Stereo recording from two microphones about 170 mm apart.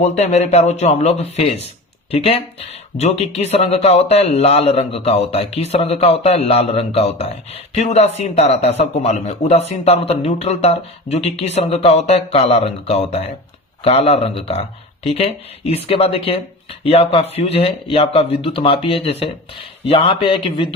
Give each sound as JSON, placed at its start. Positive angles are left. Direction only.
{"t": 0.0, "sound": "speech", "side_deg": 40}